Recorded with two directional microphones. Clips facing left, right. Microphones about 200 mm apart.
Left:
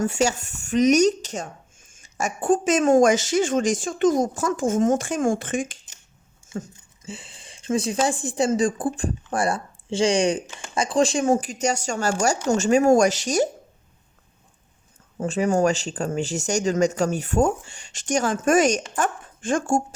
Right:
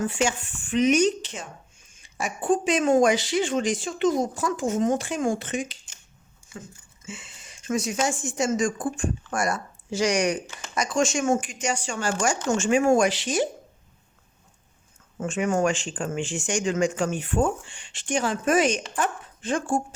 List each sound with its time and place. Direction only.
0.0 s speech: 40° left (ahead or behind)
6.4 s a sound: 25° left (ahead or behind)
7.0 s speech: 35° left (ahead or behind)
15.2 s speech: 35° left (ahead or behind)